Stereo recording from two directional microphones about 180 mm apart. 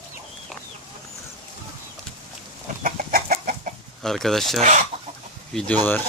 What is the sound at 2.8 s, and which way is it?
Chicken, 50° right (ahead or behind).